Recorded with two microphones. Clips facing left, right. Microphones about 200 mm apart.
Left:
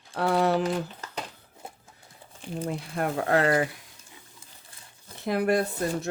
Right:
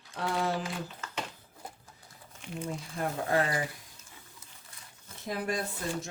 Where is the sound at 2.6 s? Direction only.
70° left (ahead or behind).